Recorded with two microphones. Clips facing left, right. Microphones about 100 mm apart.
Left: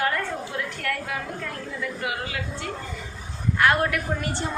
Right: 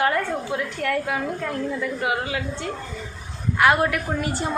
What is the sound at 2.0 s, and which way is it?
Speech, 25° right (ahead or behind).